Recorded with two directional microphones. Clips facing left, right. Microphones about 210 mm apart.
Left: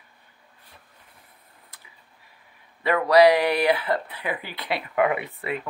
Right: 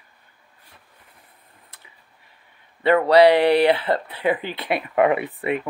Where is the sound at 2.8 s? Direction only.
30° right (ahead or behind).